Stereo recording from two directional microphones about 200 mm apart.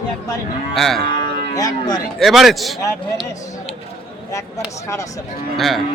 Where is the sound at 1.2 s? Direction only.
20° left (ahead or behind).